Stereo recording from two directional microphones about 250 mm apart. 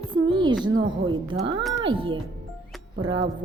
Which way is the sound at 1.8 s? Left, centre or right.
Centre.